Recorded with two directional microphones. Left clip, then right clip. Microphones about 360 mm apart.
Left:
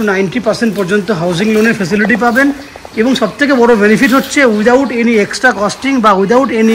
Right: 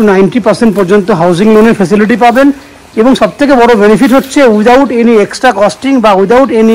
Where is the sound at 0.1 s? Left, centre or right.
Centre.